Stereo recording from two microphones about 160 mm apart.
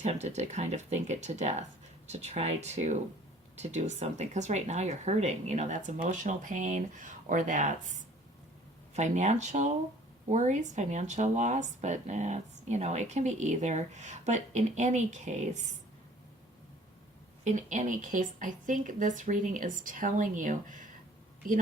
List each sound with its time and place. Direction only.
0.0 s speech: 45° right (ahead or behind)
9.0 s speech: 50° right (ahead or behind)
17.4 s speech: 50° right (ahead or behind)